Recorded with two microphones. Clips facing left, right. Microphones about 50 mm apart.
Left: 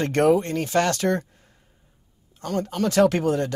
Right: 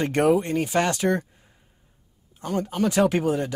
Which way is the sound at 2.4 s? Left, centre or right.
Centre.